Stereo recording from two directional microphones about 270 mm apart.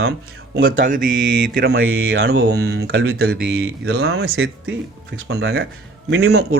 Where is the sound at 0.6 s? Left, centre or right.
Right.